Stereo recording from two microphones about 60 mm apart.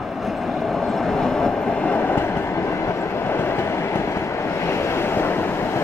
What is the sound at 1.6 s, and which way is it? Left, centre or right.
Train, left.